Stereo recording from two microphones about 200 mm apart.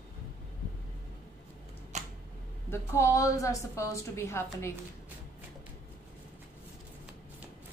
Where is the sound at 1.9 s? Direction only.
35° right (ahead or behind).